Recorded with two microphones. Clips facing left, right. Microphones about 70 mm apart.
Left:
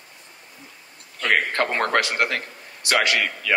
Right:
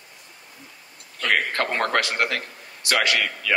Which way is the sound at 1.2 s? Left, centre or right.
Left.